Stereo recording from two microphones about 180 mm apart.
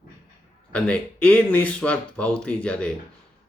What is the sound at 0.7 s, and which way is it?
Speech, 5° left (ahead or behind).